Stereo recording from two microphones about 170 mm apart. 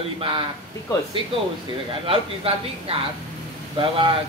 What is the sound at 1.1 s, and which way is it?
Speech, 30° right (ahead or behind).